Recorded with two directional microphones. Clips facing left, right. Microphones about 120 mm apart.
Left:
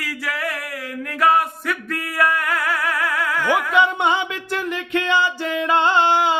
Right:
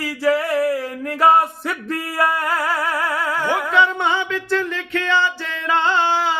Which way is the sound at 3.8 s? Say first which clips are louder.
Even; 15° left (ahead or behind).